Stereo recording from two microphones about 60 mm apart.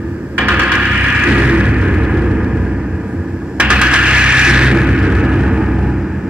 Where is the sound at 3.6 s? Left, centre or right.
Centre.